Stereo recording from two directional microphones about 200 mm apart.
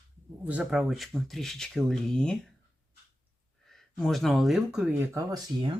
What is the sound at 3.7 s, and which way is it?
Speech, centre (ahead or behind).